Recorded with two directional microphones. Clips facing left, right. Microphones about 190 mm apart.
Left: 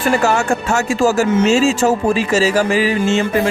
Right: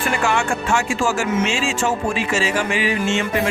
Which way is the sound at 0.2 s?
40° left (ahead or behind).